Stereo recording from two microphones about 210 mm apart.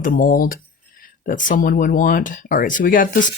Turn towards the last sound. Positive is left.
turn(degrees=40)  # may be behind; listen again after turning